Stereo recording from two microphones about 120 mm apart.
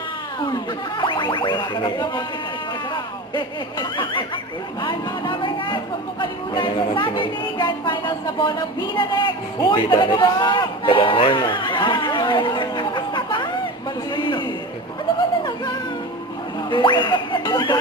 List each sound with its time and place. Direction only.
0.3 s speech: 40° left (ahead or behind)
14.2 s a sound: 40° left (ahead or behind)
16.6 s speech: 40° left (ahead or behind)